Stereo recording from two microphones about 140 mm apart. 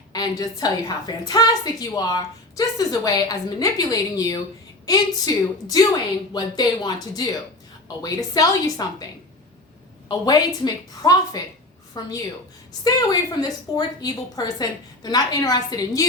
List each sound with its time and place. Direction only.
0.1 s a woman's voice: 25° left (ahead or behind)
10.1 s a woman's voice: 30° left (ahead or behind)